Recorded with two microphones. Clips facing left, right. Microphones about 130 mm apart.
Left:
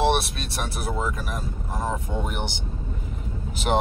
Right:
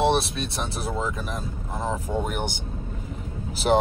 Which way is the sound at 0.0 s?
25° right (ahead or behind).